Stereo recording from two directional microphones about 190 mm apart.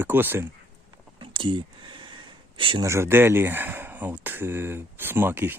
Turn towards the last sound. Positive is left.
turn(degrees=-10)  # may be behind; listen again after turning